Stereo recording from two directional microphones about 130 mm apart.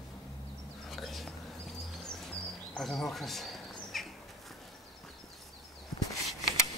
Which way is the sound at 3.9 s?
Centre (ahead or behind).